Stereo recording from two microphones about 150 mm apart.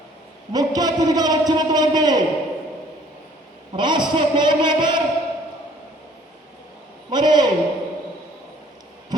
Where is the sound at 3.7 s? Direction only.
30° right (ahead or behind).